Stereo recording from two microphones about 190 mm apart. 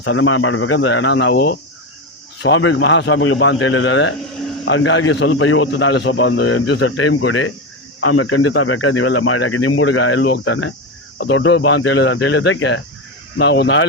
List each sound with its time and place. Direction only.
0.0 s a man's voice: 90° left; by 1.5 s 65° left (ahead or behind)
2.4 s a man's voice: 85° left
11.2 s speech: 80° left
13.3 s speech: 65° left (ahead or behind)